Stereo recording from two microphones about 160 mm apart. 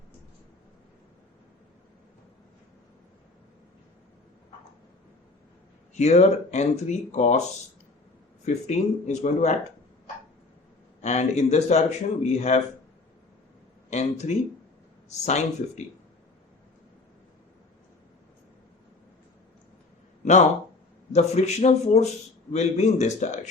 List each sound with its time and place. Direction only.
6.0 s speech: 45° left (ahead or behind)
8.4 s speech: 45° left (ahead or behind)
11.0 s speech: 45° left (ahead or behind)
13.9 s speech: 45° left (ahead or behind)
21.1 s speech: 45° left (ahead or behind)